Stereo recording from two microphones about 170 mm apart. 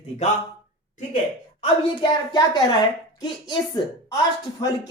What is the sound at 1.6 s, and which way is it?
A man's voice, 25° left (ahead or behind).